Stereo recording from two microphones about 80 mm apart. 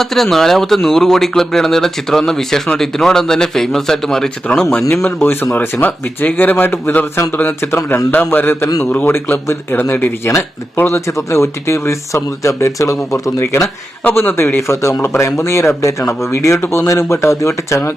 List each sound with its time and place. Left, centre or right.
0.0 s speech: centre
5.0 s a man's voice: left